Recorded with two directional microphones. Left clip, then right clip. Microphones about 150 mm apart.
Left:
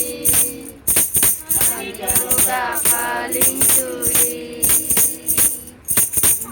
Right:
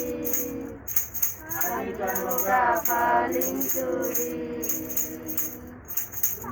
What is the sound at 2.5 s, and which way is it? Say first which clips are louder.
Music: right 2 dB; 10° left (ahead or behind).